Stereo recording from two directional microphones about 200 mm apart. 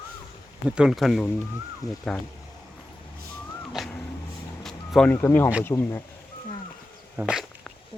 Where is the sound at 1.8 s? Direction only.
20° left (ahead or behind).